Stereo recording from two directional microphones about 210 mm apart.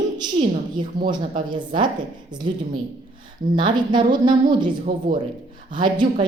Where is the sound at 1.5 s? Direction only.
20° right (ahead or behind).